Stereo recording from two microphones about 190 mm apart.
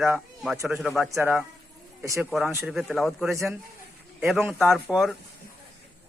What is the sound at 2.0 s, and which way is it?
Speech, 15° right (ahead or behind).